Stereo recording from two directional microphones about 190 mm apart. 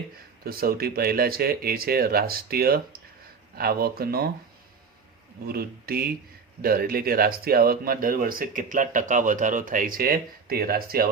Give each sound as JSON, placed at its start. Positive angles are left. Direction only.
{"t": 0.4, "sound": "speech", "side_deg": -50}
{"t": 5.5, "sound": "speech", "side_deg": -55}